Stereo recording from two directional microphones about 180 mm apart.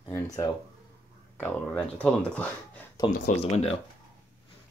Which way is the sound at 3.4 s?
35° left (ahead or behind).